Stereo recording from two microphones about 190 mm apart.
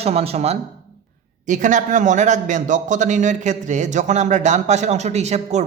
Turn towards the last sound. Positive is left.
turn(degrees=-35)  # may be behind; listen again after turning